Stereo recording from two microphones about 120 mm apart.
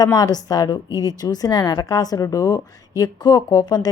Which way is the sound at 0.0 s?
35° left (ahead or behind).